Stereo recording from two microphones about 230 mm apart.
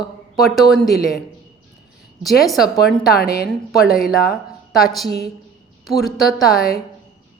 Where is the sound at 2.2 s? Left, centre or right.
Centre.